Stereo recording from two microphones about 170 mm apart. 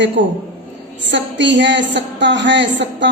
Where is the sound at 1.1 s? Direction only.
90° right.